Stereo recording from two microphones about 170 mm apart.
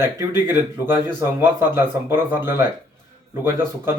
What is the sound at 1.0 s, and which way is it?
Speech, 15° right (ahead or behind).